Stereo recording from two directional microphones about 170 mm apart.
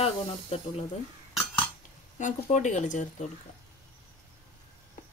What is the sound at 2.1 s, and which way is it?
Speech, 45° left (ahead or behind).